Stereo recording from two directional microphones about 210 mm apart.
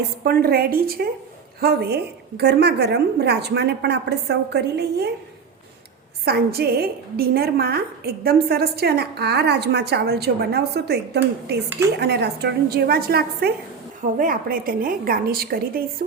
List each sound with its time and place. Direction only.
0.3 s a woman's voice: 45° right (ahead or behind)
6.2 s a woman's voice: 50° right (ahead or behind)